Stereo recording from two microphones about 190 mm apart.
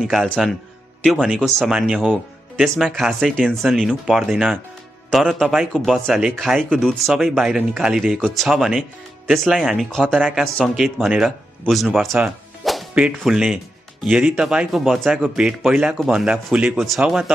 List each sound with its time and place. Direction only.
0.0 s speech: centre (ahead or behind)